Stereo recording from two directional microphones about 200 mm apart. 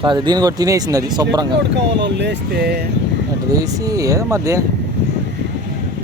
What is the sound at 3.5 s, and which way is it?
Speech, 15° right (ahead or behind).